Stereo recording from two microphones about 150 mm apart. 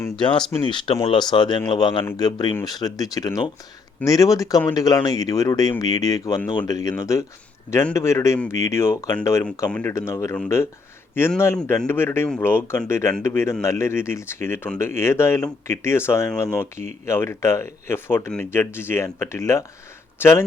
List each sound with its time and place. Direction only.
0.2 s speech: 30° left (ahead or behind); by 20.4 s 15° left (ahead or behind)